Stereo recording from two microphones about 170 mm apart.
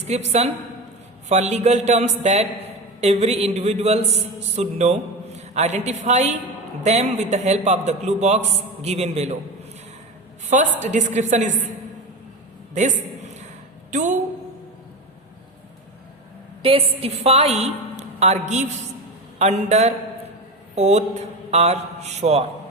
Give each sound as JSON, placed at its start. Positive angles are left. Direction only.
{"t": 0.0, "sound": "a man's voice", "side_deg": -40}
{"t": 10.4, "sound": "a woman's voice", "side_deg": -45}
{"t": 13.9, "sound": "a man's voice", "side_deg": -45}
{"t": 16.6, "sound": "a man's voice", "side_deg": -35}